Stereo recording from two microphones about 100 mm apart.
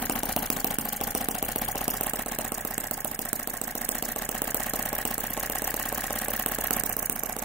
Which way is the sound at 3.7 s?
20° left (ahead or behind).